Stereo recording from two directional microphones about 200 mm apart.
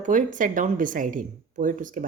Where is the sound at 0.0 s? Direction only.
40° right (ahead or behind).